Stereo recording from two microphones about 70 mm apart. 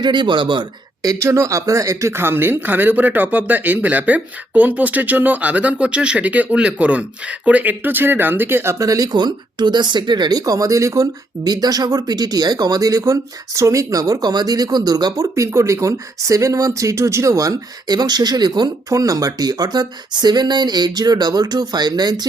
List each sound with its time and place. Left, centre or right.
0.0 s speech: right
1.2 s speech: right
8.7 s speech: right
9.1 s speech: right
11.4 s speech: right
15.1 s speech: right
18.9 s speech: right